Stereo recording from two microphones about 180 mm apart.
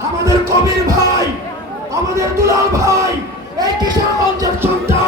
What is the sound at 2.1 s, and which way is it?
Music, 15° right (ahead or behind).